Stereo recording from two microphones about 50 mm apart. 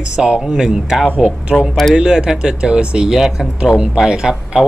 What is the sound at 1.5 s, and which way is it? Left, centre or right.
Speech, centre.